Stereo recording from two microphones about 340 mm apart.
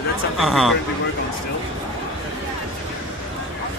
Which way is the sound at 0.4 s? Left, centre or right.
Centre.